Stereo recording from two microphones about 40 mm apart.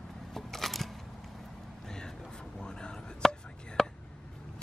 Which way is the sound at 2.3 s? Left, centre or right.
Centre.